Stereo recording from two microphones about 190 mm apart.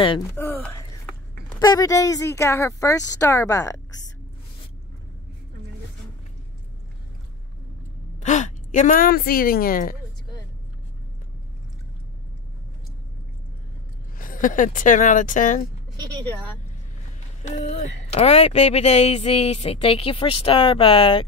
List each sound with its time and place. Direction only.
0.3 s a sound: 10° left (ahead or behind)
1.6 s a woman's voice: 20° left (ahead or behind)
8.2 s speech: 40° left (ahead or behind)
14.1 s speech: 45° left (ahead or behind)
17.5 s speech: 35° left (ahead or behind)